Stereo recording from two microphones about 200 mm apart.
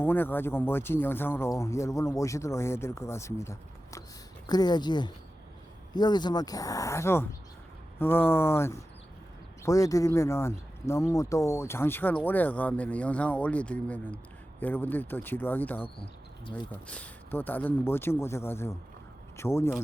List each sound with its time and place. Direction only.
0.0 s speech: 10° left (ahead or behind)